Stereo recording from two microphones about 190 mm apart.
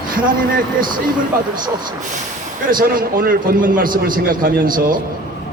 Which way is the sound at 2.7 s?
45° right (ahead or behind).